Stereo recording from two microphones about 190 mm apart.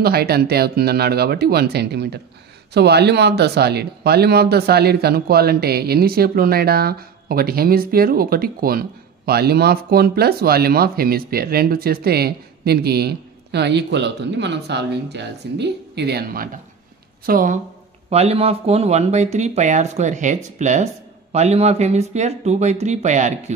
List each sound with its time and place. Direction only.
0.0 s a woman's voice: 55° right (ahead or behind)
18.1 s speech: 35° right (ahead or behind)